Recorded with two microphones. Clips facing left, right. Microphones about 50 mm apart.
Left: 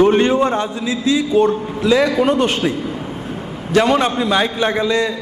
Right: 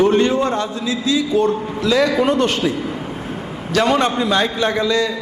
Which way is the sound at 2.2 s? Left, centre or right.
Centre.